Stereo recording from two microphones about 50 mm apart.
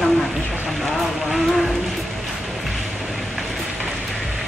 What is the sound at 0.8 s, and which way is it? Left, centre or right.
Vehicle, centre.